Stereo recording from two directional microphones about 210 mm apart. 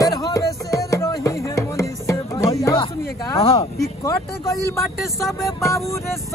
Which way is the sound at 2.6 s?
20° left (ahead or behind).